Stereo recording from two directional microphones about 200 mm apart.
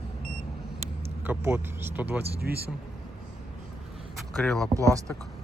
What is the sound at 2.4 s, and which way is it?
Speech, 50° right (ahead or behind).